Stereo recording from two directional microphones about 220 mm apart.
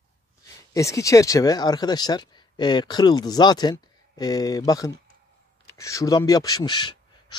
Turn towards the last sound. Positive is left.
turn(degrees=20)  # may be behind; listen again after turning